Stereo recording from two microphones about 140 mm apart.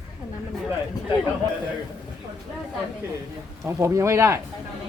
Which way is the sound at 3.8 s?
20° right (ahead or behind).